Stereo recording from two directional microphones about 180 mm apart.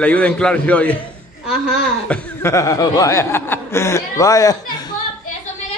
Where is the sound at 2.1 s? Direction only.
10° left (ahead or behind).